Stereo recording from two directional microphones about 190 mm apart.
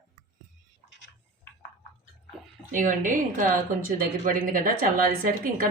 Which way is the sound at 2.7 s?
45° right (ahead or behind).